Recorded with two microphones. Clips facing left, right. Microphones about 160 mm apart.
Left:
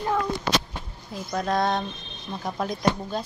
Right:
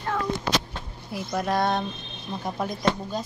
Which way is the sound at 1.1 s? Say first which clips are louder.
Even; 5° right (ahead or behind).